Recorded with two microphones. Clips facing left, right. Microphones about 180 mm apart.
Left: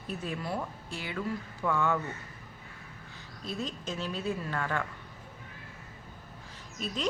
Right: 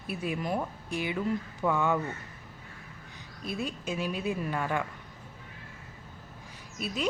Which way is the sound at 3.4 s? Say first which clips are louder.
Right 2 dB; 10° right (ahead or behind).